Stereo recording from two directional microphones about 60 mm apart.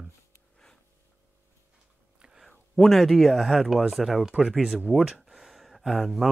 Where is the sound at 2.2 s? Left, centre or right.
Centre.